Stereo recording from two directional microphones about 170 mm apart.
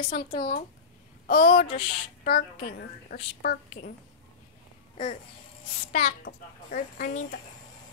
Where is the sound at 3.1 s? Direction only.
60° left (ahead or behind).